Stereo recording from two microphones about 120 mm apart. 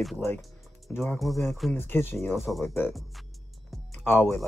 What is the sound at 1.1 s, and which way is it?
Speech, centre (ahead or behind).